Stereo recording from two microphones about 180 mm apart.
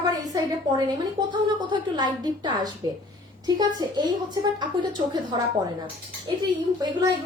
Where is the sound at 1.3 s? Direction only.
25° right (ahead or behind).